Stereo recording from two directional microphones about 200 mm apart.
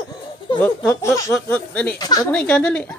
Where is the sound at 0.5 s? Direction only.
5° left (ahead or behind).